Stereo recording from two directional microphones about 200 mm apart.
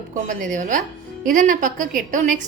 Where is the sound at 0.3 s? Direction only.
40° right (ahead or behind).